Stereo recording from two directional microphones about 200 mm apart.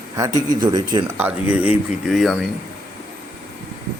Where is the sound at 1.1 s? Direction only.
10° right (ahead or behind).